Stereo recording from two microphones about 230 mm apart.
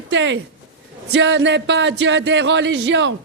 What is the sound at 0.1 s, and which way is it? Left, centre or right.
Speech, right.